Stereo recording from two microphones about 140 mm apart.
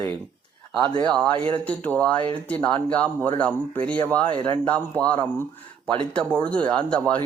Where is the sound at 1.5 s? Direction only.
10° left (ahead or behind).